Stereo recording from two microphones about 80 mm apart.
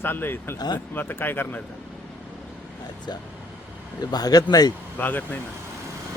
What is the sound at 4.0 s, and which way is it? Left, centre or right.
Speech, left.